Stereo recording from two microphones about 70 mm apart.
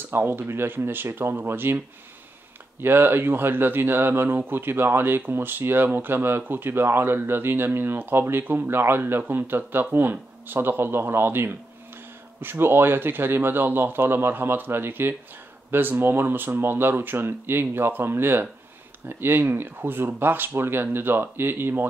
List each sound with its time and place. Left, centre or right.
0.1 s speech: right
2.8 s speech: right